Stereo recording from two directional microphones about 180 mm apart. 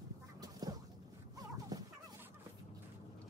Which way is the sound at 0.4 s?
20° right (ahead or behind).